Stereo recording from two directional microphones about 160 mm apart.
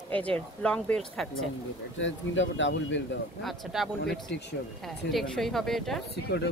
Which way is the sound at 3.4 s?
Centre (ahead or behind).